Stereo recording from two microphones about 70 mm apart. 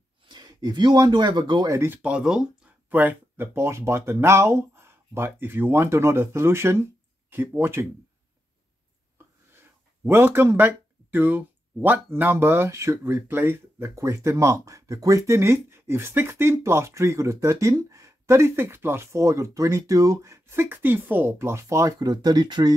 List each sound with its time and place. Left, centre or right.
0.3 s speech: right
2.0 s speech: centre
2.9 s speech: right
3.5 s speech: right
9.5 s speech: right
13.0 s speech: right
13.8 s speech: right
21.4 s speech: right
22.0 s speech: right